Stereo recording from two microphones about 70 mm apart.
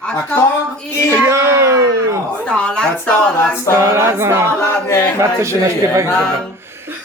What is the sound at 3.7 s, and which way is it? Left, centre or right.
Male singing, right.